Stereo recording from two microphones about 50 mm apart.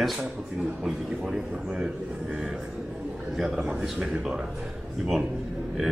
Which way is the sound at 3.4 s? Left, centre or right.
Centre.